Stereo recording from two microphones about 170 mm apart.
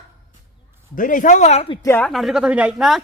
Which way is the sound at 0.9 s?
50° left (ahead or behind).